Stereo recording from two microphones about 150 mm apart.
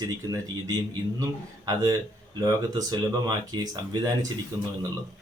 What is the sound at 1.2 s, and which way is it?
Speech, 25° right (ahead or behind).